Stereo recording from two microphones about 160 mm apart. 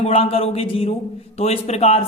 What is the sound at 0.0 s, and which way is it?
Speech, 40° left (ahead or behind).